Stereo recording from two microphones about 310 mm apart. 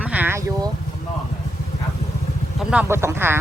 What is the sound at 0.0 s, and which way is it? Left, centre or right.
Vehicle, centre.